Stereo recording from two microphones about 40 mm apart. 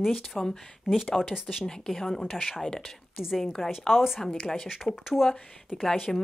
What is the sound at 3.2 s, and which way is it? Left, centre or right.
Speech, centre.